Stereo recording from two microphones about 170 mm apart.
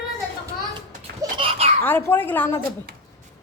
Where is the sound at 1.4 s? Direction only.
35° right (ahead or behind).